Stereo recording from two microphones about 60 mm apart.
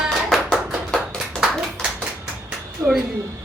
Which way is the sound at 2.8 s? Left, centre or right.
Right.